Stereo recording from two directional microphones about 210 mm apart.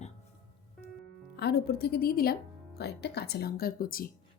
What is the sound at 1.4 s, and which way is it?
A woman's voice, 50° left (ahead or behind).